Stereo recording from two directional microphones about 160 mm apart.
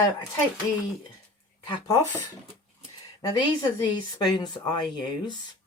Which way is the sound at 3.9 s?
25° left (ahead or behind).